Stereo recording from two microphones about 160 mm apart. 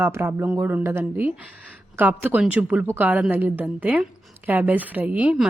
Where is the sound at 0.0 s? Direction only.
15° right (ahead or behind).